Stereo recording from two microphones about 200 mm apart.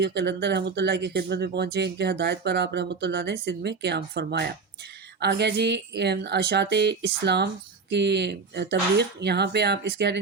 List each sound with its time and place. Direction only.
0.0 s speech: 60° right (ahead or behind)